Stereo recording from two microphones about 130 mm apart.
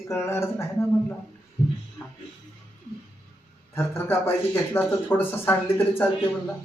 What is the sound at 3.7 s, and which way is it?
Speech, 15° left (ahead or behind).